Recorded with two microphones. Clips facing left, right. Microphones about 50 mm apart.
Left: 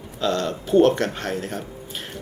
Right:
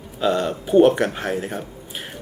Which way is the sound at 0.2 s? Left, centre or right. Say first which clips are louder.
Right 3 dB; centre.